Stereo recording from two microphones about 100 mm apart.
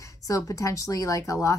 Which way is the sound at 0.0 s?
30° left (ahead or behind).